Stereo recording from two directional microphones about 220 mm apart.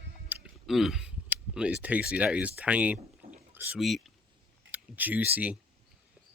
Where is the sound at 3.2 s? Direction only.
25° right (ahead or behind).